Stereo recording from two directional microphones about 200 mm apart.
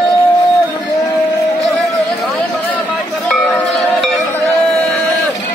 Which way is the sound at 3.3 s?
Centre (ahead or behind).